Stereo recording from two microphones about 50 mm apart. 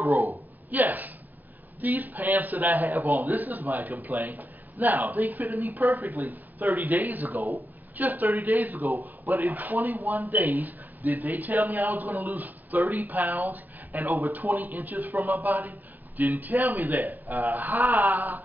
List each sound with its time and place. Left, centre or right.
0.1 s speech: right